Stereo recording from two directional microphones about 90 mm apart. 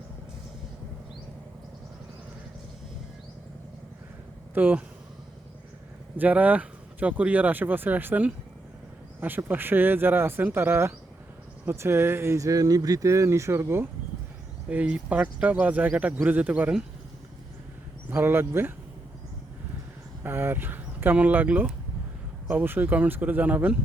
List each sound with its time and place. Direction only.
4.5 s speech: 20° right (ahead or behind)
6.1 s speech: 15° right (ahead or behind)
14.7 s speech: 15° right (ahead or behind)
18.1 s speech: 25° right (ahead or behind)
20.2 s speech: 25° right (ahead or behind)